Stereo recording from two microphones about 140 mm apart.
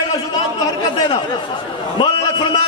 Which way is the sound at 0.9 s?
30° left (ahead or behind).